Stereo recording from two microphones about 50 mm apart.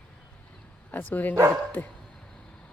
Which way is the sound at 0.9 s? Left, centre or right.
Left.